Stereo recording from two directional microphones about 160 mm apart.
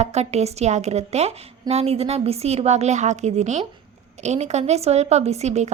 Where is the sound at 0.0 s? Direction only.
45° right (ahead or behind).